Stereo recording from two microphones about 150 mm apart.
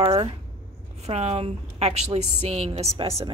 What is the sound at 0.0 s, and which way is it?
A woman's voice, 35° right (ahead or behind).